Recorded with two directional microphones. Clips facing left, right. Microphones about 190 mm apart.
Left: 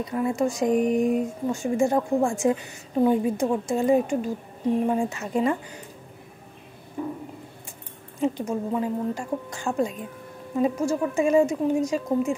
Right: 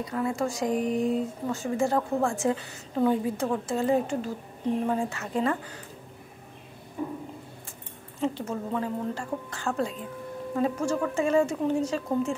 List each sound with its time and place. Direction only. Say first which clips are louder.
0.0 s speech: left 4 dB; 20° left (ahead or behind)
8.2 s speech: left 4 dB; 15° left (ahead or behind)